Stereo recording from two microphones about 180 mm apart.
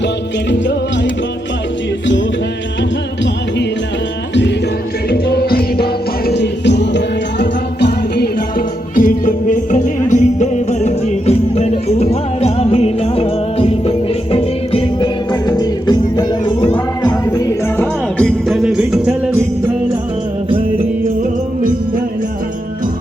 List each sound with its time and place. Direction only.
5.0 s music: 60° left (ahead or behind); by 17.8 s 15° left (ahead or behind)
18.2 s music: 5° left (ahead or behind)